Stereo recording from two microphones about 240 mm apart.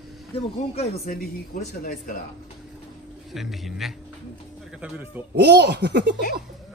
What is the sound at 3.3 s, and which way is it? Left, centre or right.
A man's voice, centre.